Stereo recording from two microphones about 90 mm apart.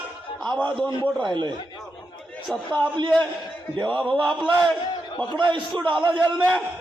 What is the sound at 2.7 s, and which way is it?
Speech, 60° right (ahead or behind).